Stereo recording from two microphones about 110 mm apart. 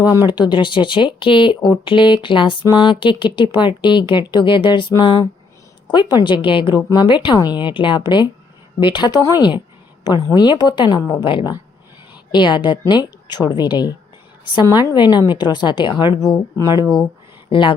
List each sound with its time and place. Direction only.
0.0 s speech: 35° left (ahead or behind)
10.6 s speech: 40° left (ahead or behind)
16.8 s speech: 5° left (ahead or behind)
17.5 s speech: 50° left (ahead or behind)